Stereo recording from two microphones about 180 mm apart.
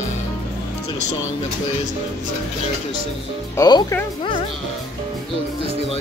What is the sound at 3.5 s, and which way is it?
Speech, 20° left (ahead or behind).